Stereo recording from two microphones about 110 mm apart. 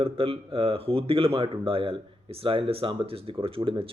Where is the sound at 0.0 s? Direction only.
55° right (ahead or behind).